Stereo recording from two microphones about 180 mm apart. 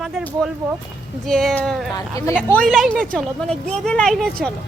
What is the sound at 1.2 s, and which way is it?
A woman's voice, 5° left (ahead or behind).